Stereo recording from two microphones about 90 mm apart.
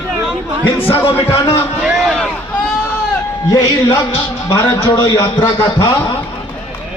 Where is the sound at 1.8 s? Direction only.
5° right (ahead or behind).